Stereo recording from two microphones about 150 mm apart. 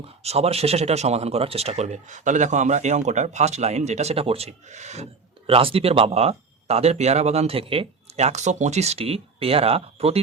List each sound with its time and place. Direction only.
0.2 s speech: 45° right (ahead or behind)
5.5 s speech: 40° right (ahead or behind)